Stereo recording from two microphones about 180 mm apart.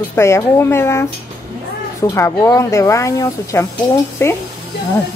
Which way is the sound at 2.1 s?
15° left (ahead or behind).